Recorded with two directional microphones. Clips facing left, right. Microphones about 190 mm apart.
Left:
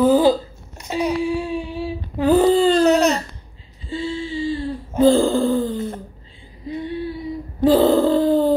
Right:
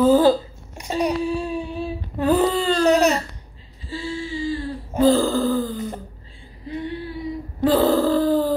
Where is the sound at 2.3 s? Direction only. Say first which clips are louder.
Left 5 dB; 30° left (ahead or behind).